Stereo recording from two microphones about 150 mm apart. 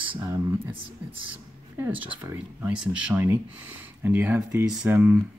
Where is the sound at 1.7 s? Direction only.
10° right (ahead or behind).